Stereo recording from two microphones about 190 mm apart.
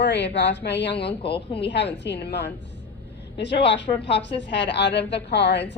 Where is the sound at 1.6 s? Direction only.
65° left (ahead or behind).